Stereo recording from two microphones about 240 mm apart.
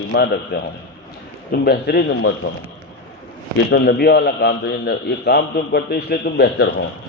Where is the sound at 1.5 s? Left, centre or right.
Left.